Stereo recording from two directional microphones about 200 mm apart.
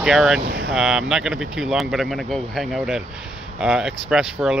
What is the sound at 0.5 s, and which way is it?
Speech, 55° right (ahead or behind).